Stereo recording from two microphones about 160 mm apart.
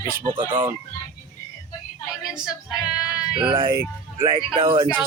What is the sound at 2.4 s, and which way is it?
Female singing, 5° right (ahead or behind).